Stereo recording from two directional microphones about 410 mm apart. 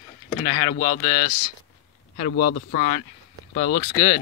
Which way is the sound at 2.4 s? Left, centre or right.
Centre.